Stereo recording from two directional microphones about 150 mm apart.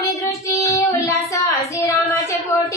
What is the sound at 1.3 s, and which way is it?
Child singing, 20° left (ahead or behind).